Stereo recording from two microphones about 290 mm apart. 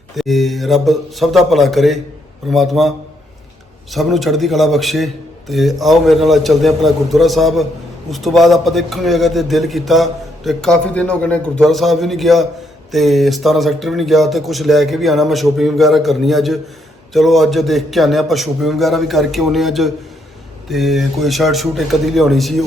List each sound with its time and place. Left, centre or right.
0.2 s a man's voice: centre
3.9 s a man's voice: centre